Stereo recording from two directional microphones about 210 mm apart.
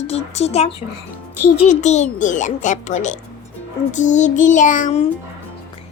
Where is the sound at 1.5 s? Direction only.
35° left (ahead or behind).